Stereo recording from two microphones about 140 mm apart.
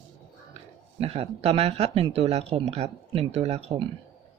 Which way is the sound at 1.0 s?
45° right (ahead or behind).